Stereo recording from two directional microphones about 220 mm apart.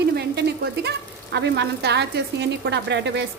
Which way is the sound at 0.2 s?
50° right (ahead or behind).